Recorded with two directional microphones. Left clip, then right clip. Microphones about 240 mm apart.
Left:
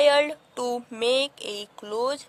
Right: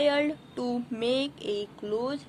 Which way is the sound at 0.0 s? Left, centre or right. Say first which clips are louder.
Left 6 dB; left.